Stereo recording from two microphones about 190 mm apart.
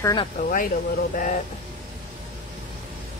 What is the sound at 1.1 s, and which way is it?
Speech, 45° left (ahead or behind).